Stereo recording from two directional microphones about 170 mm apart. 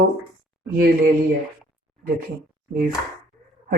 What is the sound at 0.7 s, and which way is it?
Speech, 60° right (ahead or behind).